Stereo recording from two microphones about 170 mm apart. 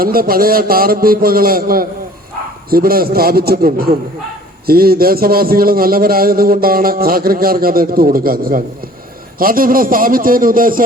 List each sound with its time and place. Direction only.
0.0 s a man's voice: 60° right (ahead or behind)